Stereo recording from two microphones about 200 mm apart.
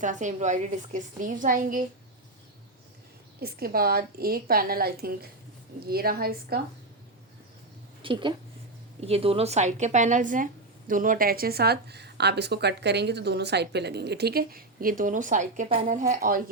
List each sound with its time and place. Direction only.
0.0 s a woman's voice: 40° right (ahead or behind)
3.4 s speech: 50° right (ahead or behind)
8.0 s a woman's voice: 25° right (ahead or behind); by 16.4 s 45° right (ahead or behind)